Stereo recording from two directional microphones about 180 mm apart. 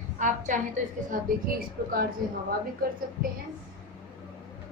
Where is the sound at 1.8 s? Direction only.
55° right (ahead or behind).